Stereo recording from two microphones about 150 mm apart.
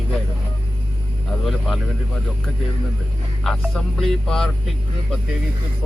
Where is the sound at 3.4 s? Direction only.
Centre (ahead or behind).